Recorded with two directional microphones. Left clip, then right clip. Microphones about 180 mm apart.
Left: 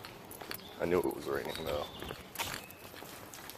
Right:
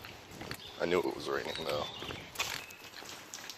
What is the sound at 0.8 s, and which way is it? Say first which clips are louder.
Speech: even; 10° right (ahead or behind).